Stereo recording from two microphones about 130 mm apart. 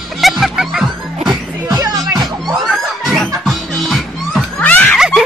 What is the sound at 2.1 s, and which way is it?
Music, centre (ahead or behind).